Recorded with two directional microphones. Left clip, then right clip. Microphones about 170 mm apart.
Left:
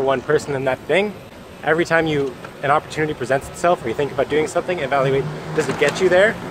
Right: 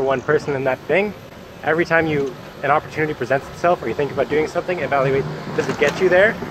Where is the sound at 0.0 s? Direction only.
20° left (ahead or behind).